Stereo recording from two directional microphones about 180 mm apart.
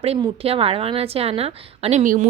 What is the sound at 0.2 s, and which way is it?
A woman's voice, 30° right (ahead or behind).